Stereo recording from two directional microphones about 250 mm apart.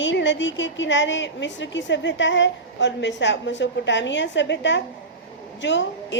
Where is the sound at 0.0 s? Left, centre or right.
Left.